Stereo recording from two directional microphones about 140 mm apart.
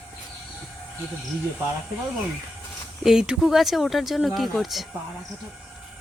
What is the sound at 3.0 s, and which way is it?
Speech, 5° right (ahead or behind).